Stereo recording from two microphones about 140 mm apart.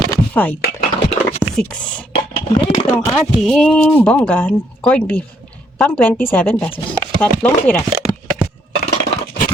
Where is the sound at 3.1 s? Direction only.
Centre (ahead or behind).